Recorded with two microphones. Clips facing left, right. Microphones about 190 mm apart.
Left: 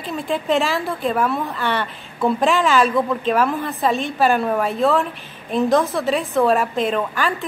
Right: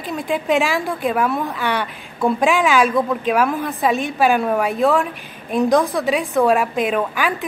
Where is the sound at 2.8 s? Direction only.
Centre (ahead or behind).